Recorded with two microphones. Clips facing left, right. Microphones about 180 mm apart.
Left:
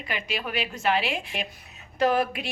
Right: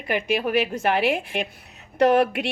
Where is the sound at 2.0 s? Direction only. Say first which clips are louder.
Right 5 dB; 70° right (ahead or behind).